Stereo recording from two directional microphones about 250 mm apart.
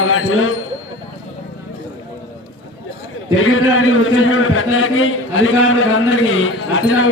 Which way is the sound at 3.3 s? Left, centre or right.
Left.